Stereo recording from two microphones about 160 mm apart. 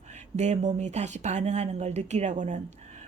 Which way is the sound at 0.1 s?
45° right (ahead or behind).